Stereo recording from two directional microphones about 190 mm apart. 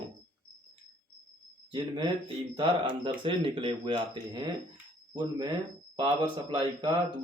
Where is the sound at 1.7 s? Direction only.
25° right (ahead or behind).